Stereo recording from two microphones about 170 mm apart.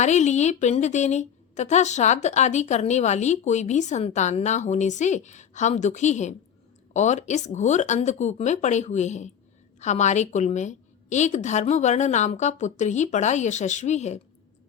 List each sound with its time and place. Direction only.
0.0 s a woman's voice: 45° left (ahead or behind)